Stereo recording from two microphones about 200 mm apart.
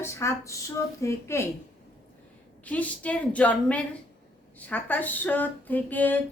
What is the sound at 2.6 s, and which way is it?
A woman's voice, 5° left (ahead or behind).